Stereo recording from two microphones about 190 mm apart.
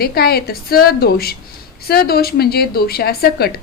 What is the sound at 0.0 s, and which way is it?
A woman's voice, 55° left (ahead or behind).